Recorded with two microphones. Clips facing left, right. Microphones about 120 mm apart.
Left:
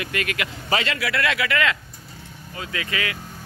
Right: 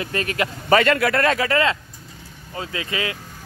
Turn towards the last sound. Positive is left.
turn(degrees=-25)  # may be behind; listen again after turning